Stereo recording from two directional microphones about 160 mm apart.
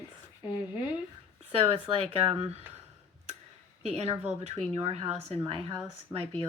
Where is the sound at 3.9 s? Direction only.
40° right (ahead or behind).